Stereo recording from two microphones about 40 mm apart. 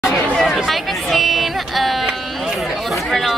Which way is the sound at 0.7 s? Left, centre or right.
Centre.